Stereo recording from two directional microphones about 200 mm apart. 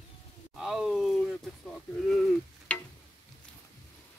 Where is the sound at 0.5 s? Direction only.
Centre (ahead or behind).